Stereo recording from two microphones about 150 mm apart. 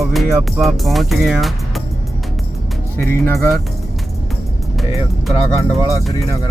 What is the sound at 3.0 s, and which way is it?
Speech, 15° left (ahead or behind).